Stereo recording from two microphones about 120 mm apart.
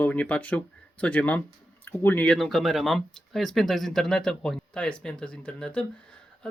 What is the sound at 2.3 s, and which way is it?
Speech, centre (ahead or behind).